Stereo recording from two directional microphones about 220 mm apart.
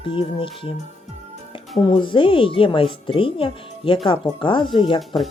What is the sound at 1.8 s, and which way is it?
Speech, 20° left (ahead or behind).